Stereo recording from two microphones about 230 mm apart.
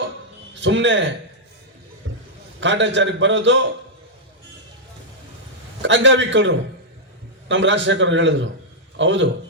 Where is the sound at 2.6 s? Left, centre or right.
Right.